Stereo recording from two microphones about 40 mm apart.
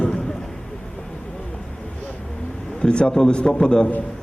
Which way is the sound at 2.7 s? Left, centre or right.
Left.